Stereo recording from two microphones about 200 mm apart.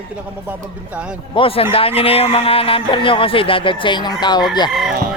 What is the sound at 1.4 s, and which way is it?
Speech, 30° left (ahead or behind).